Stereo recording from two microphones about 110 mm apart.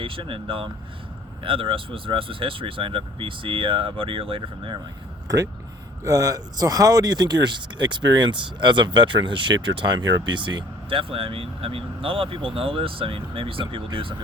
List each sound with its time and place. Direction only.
0.0 s speech: 55° right (ahead or behind)
6.1 s speech: 30° right (ahead or behind); by 14.2 s 55° right (ahead or behind)